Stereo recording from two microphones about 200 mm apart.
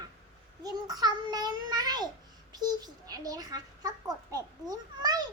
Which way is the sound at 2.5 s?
20° right (ahead or behind).